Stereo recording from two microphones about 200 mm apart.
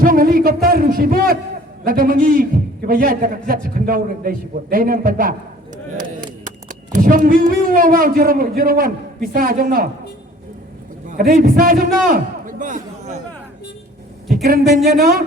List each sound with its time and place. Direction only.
0.0 s a sound: 45° right (ahead or behind)
1.8 s a man's voice: 45° right (ahead or behind)
11.1 s a man's voice: 45° right (ahead or behind)
14.4 s a man's voice: 50° right (ahead or behind)